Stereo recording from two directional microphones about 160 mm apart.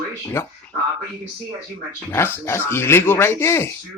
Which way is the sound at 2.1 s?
15° left (ahead or behind).